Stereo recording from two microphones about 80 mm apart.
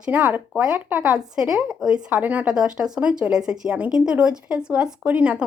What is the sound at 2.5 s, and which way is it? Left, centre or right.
Speech, centre.